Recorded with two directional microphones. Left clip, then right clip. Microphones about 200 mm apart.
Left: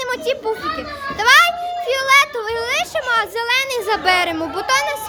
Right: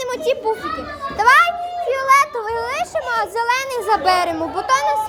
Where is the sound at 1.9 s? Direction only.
10° left (ahead or behind).